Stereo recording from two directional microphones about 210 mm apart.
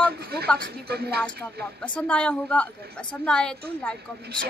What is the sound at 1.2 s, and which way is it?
A woman's voice, 5° left (ahead or behind).